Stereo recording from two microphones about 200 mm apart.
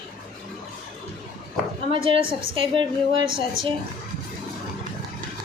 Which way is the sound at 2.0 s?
25° right (ahead or behind).